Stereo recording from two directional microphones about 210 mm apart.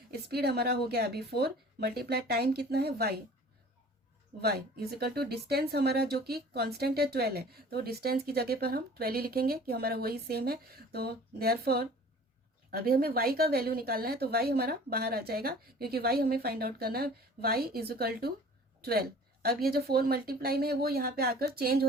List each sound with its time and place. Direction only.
0.1 s speech: 50° right (ahead or behind)
4.4 s speech: 50° right (ahead or behind)
18.8 s a sound: 45° right (ahead or behind)
19.6 s speech: 45° right (ahead or behind)